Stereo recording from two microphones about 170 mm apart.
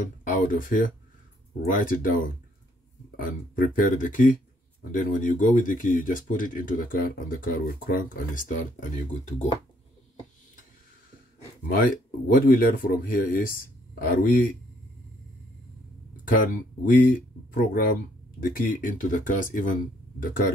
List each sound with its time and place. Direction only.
0.2 s speech: 55° left (ahead or behind)
12.3 s speech: 60° left (ahead or behind)
16.3 s speech: 55° left (ahead or behind)